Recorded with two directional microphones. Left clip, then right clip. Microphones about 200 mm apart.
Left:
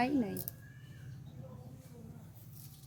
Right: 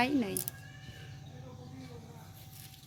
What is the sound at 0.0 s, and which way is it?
Speech, 15° right (ahead or behind).